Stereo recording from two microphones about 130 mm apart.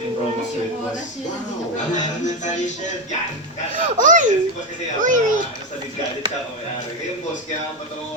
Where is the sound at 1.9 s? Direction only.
65° left (ahead or behind).